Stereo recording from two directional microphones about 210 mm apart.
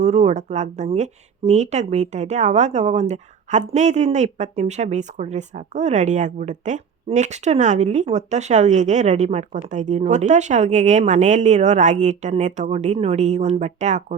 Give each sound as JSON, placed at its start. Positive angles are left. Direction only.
{"t": 0.0, "sound": "speech", "side_deg": -30}